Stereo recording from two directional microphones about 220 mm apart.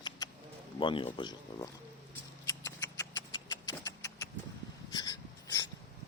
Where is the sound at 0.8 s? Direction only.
20° left (ahead or behind).